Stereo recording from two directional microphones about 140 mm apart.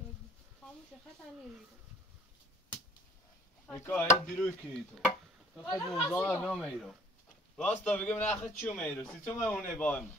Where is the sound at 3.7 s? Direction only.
15° left (ahead or behind).